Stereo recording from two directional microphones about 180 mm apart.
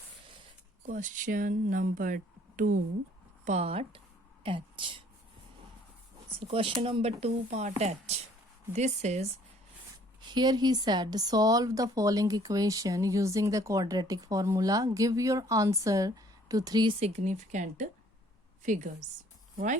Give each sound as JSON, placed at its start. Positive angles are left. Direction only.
{"t": 0.8, "sound": "speech", "side_deg": -45}
{"t": 3.4, "sound": "speech", "side_deg": -35}
{"t": 6.5, "sound": "speech", "side_deg": -30}
{"t": 10.2, "sound": "speech", "side_deg": -25}
{"t": 17.0, "sound": "a woman's voice", "side_deg": -40}